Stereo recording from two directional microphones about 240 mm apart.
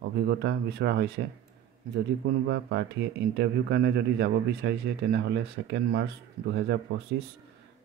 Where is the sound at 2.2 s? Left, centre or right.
Right.